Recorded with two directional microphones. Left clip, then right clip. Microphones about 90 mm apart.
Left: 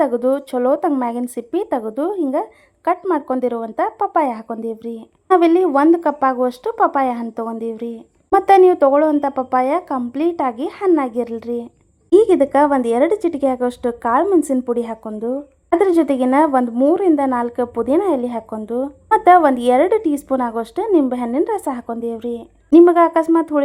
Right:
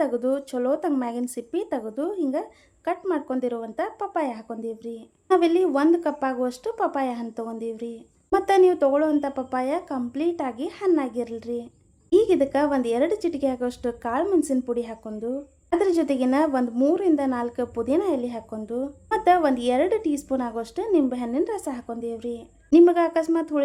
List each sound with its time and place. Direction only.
0.0 s a woman's voice: 35° left (ahead or behind)
12.1 s a woman's voice: 50° left (ahead or behind)